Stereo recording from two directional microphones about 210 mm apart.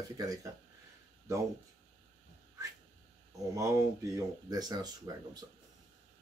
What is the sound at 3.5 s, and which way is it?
Speech, 15° right (ahead or behind).